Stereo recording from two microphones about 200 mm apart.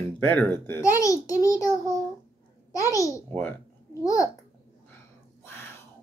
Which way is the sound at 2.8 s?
15° left (ahead or behind).